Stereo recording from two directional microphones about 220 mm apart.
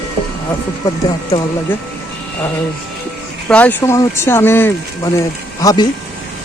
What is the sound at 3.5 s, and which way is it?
Speech, 5° left (ahead or behind).